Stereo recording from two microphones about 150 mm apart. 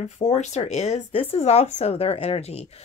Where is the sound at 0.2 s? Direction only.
50° left (ahead or behind).